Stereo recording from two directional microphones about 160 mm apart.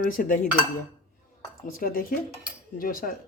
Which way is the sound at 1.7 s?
60° left (ahead or behind).